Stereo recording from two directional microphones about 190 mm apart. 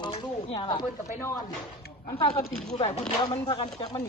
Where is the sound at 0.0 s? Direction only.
25° left (ahead or behind).